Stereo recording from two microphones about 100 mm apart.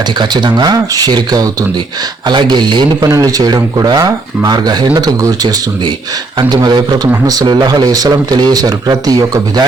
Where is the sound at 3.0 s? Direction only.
35° right (ahead or behind).